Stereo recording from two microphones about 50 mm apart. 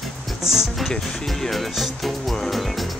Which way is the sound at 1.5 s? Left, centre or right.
Centre.